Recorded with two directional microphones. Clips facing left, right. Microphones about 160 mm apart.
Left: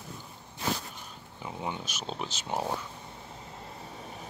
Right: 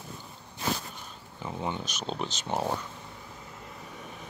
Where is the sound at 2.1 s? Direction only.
5° left (ahead or behind).